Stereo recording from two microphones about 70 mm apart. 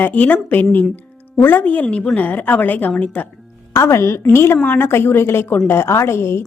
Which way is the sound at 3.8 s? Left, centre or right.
Left.